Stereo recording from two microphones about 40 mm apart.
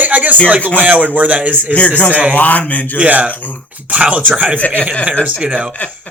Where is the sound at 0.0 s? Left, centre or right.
Right.